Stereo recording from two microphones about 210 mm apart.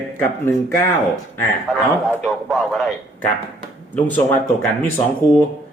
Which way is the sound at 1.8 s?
Centre (ahead or behind).